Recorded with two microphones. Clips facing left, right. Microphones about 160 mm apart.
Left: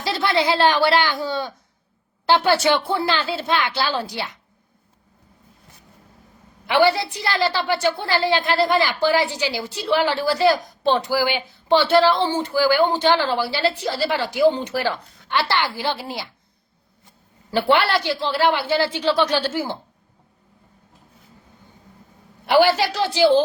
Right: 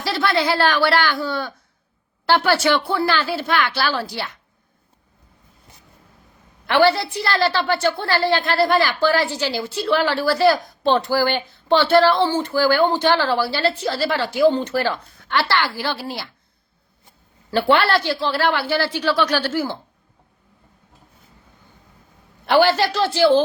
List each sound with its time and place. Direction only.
0.0 s a woman's voice: 20° left (ahead or behind)
6.7 s a woman's voice: 15° left (ahead or behind)
17.5 s a woman's voice: 15° left (ahead or behind)
22.4 s a woman's voice: 10° left (ahead or behind)